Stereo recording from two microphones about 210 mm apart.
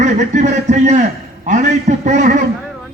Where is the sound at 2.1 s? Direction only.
35° right (ahead or behind).